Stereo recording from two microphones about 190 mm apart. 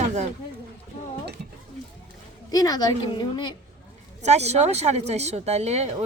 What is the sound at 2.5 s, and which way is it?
A woman's voice, 20° left (ahead or behind).